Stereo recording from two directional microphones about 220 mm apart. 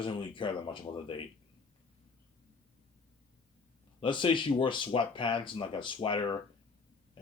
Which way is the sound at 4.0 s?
20° left (ahead or behind).